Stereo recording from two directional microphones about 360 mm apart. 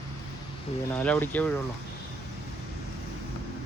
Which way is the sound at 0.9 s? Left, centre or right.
Centre.